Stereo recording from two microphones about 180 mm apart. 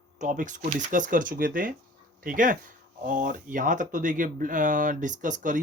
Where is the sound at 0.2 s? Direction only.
45° right (ahead or behind).